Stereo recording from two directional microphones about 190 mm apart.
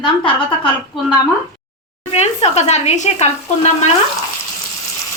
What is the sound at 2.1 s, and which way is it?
Speech, 35° left (ahead or behind).